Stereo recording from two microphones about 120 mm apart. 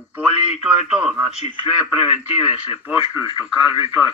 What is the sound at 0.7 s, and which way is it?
Speech, 10° right (ahead or behind).